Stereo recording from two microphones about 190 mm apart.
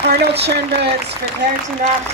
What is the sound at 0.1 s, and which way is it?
Speech, 55° right (ahead or behind).